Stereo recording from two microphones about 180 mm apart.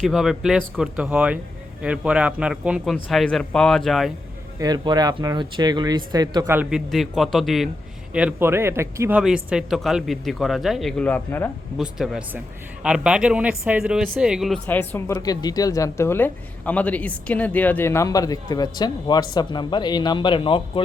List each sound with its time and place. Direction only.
0.0 s speech: centre (ahead or behind)
4.6 s speech: 20° right (ahead or behind)
6.6 s speech: 5° right (ahead or behind)
11.8 s speech: centre (ahead or behind); by 20.8 s 30° left (ahead or behind)